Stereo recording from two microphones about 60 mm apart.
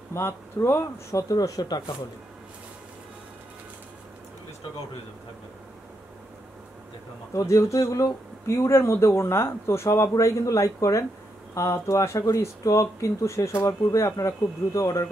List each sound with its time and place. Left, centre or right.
0.1 s speech: left
1.1 s speech: left
7.3 s speech: left